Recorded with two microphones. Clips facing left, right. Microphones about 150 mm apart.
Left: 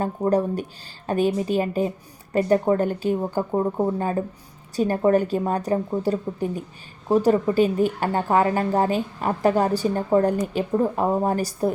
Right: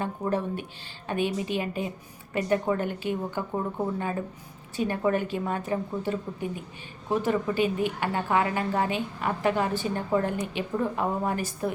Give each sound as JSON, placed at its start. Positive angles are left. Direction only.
{"t": 0.0, "sound": "speech", "side_deg": 40}